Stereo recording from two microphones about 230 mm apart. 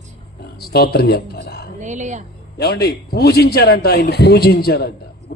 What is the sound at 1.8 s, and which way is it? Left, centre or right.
Speech, right.